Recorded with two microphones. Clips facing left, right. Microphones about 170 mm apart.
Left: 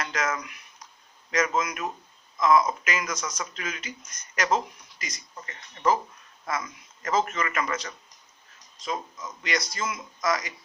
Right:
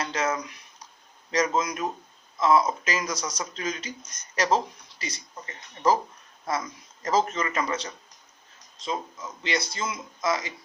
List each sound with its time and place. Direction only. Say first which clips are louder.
0.0 s speech: right 2 dB; 30° right (ahead or behind)